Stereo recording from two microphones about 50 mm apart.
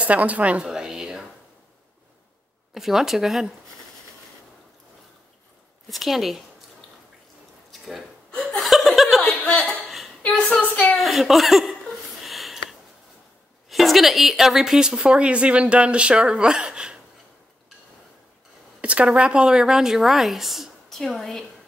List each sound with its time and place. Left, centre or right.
0.0 s a woman's voice: right
0.7 s a sound: centre
2.7 s a woman's voice: centre
5.9 s a woman's voice: centre
8.3 s chuckle: centre
9.4 s chuckle: centre
9.8 s a sound: centre
11.0 s speech: centre
12.2 s a sound: centre
13.7 s a woman's voice: centre
18.8 s a woman's voice: right; by 21.5 s centre